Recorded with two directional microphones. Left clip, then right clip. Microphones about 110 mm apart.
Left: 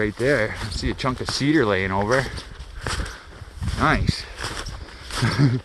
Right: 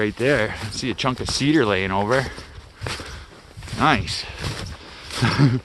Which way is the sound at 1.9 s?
25° right (ahead or behind).